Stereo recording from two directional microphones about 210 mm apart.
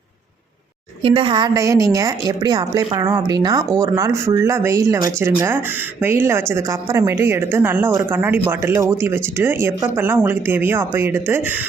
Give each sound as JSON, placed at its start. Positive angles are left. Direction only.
{"t": 1.0, "sound": "a woman's voice", "side_deg": -25}